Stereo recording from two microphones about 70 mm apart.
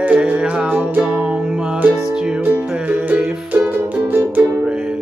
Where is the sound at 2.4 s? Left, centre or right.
Right.